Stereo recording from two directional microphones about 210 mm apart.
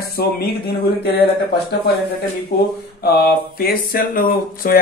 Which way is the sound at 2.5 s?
50° left (ahead or behind).